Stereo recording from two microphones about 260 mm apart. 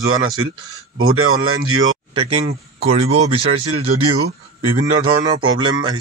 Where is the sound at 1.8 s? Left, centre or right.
Centre.